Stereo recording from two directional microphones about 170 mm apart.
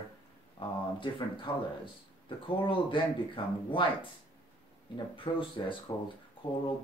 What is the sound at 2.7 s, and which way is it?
Speech, 30° left (ahead or behind).